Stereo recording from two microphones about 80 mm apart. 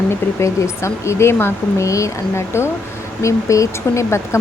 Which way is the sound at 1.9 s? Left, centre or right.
Left.